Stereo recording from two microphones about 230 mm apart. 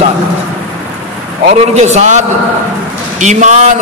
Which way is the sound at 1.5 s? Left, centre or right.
Right.